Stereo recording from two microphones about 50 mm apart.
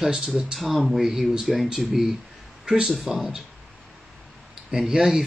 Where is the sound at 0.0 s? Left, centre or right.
Centre.